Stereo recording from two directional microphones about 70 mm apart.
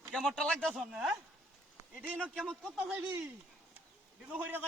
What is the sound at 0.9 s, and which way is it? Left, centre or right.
Speech, centre.